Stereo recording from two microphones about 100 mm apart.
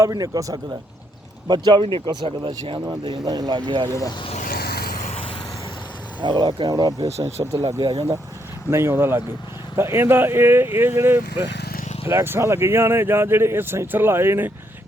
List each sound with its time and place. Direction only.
0.1 s speech: 35° right (ahead or behind)
1.5 s speech: 45° right (ahead or behind)
3.8 s speech: 30° left (ahead or behind)
6.2 s speech: 50° right (ahead or behind); by 7.8 s 30° right (ahead or behind)
7.8 s speech: 45° right (ahead or behind)
8.7 s speech: 25° right (ahead or behind)